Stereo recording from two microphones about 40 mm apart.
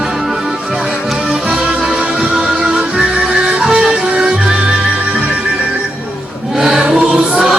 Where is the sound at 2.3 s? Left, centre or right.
Centre.